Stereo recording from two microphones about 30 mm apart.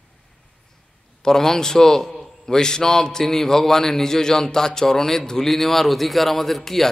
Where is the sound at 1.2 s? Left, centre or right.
Centre.